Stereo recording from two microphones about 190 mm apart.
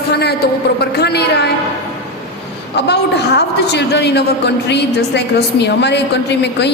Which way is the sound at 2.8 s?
60° left (ahead or behind).